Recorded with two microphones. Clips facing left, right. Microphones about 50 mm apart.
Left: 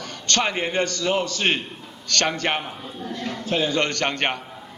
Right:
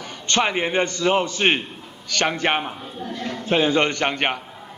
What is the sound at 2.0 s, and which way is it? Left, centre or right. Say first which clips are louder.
A man's voice: right 2 dB; centre.